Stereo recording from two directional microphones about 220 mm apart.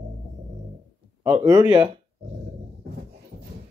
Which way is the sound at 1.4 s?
15° right (ahead or behind).